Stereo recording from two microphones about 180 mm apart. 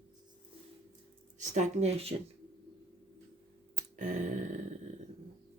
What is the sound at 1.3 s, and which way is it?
Speech, 40° right (ahead or behind).